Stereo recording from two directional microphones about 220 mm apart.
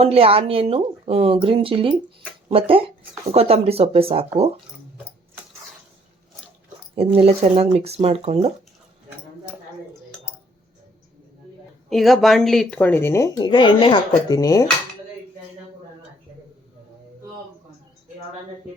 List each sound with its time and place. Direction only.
0.0 s speech: 25° right (ahead or behind)
6.9 s speech: 25° right (ahead or behind)
11.9 s speech: centre (ahead or behind)